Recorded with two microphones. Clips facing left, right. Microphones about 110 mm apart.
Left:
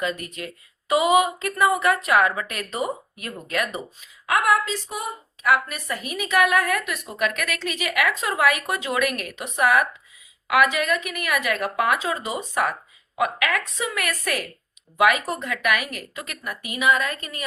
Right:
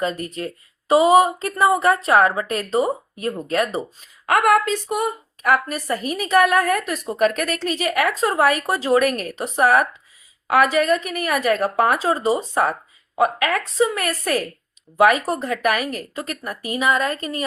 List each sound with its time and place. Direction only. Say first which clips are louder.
0.0 s speech: right 4 dB; 35° right (ahead or behind)
4.3 s a woman's voice: right 4 dB; 55° right (ahead or behind); by 17.4 s 35° right (ahead or behind)